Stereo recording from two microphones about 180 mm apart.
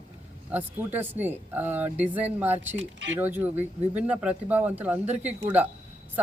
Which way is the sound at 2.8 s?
90° right.